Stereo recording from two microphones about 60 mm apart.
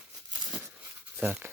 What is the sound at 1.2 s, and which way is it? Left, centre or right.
Speech, right.